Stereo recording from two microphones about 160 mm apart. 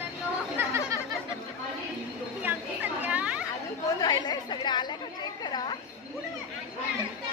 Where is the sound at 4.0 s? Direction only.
25° left (ahead or behind).